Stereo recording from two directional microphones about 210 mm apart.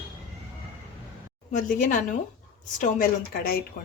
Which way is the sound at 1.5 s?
35° left (ahead or behind).